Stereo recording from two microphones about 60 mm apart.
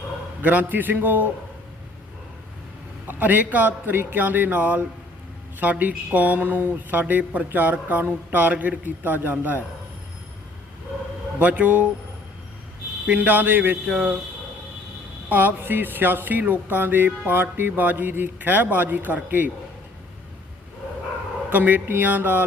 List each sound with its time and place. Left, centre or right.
0.4 s speech: right
3.1 s a man's voice: right
11.3 s speech: right
13.1 s speech: right
15.3 s a man's voice: right
21.5 s a man's voice: right